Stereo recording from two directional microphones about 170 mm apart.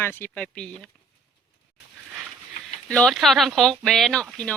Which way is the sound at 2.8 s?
5° left (ahead or behind).